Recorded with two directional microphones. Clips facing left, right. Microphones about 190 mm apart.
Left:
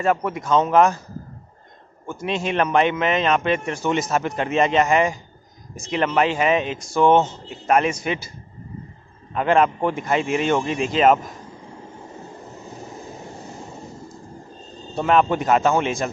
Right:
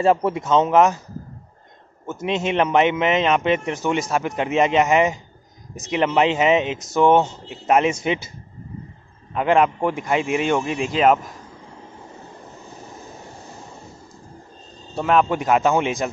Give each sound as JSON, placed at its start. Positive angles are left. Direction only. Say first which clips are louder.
{"t": 0.0, "sound": "a man's voice", "louder": "right 3 dB", "side_deg": -30}
{"t": 2.0, "sound": "a man's voice", "louder": "right 2 dB", "side_deg": -20}
{"t": 9.3, "sound": "speech", "louder": "even", "side_deg": -10}
{"t": 15.0, "sound": "speech", "louder": "even", "side_deg": 0}